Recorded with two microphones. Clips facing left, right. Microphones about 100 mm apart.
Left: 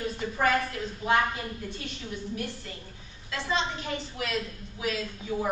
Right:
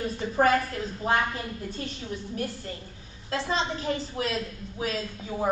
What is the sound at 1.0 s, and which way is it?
Speech, 40° right (ahead or behind).